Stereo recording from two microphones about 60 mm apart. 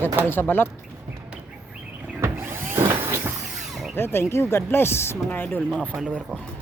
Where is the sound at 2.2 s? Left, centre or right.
Right.